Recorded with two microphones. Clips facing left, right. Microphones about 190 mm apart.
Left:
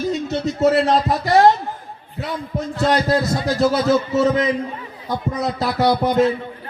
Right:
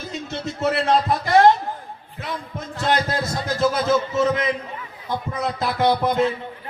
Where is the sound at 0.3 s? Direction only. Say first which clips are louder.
Left 5 dB; 40° left (ahead or behind).